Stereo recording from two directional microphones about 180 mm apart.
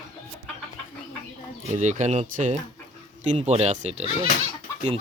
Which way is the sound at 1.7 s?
40° right (ahead or behind).